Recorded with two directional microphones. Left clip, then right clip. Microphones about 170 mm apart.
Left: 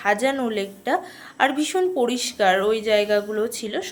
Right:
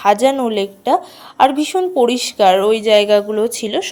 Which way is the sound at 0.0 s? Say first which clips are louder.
Right 8 dB; 35° right (ahead or behind).